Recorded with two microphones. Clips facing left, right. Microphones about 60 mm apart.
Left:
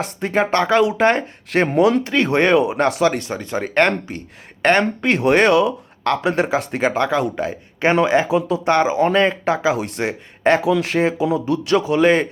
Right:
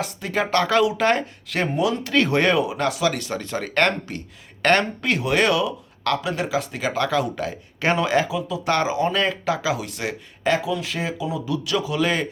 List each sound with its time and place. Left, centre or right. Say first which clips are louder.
0.0 s speech: left 5 dB; left
2.6 s speech: left 5 dB; left
5.0 s speech: left 7 dB; left
8.3 s a man's voice: left 8 dB; left
8.6 s speech: left 3 dB; left
10.6 s speech: left 8 dB; left
10.9 s a man's voice: left 9 dB; left